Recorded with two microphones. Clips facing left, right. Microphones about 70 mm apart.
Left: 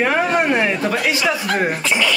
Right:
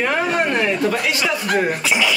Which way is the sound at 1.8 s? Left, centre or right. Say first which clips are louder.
Even; centre.